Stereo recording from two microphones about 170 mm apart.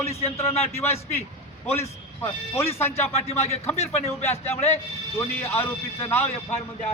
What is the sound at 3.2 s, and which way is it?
Speech, 35° left (ahead or behind).